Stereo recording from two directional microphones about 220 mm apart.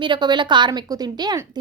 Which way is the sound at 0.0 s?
20° right (ahead or behind).